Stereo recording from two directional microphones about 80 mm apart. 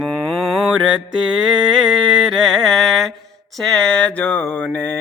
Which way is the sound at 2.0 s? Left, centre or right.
Centre.